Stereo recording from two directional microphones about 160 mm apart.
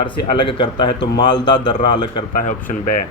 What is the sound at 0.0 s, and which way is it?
Speech, 30° left (ahead or behind).